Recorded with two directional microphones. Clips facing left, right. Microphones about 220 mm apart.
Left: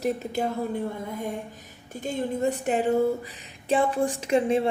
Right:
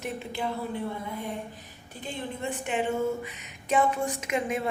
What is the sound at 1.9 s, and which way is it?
Speech, 45° left (ahead or behind).